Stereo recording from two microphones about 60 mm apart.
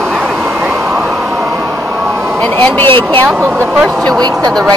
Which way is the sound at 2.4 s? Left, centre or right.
Left.